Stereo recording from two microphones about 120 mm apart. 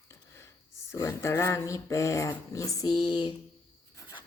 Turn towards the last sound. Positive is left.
turn(degrees=40)  # may be behind; listen again after turning